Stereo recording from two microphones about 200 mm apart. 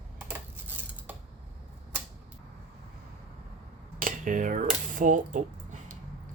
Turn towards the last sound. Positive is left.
turn(degrees=-40)  # may be behind; listen again after turning